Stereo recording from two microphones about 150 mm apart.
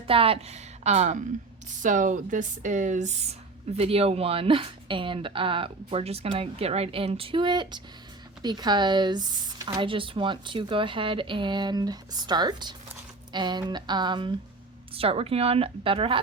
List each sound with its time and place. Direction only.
0.1 s a woman's voice: 40° right (ahead or behind)